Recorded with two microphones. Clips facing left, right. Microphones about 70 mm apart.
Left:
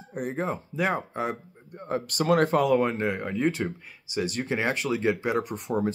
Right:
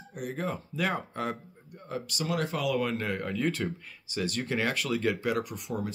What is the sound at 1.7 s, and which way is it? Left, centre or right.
Speech, left.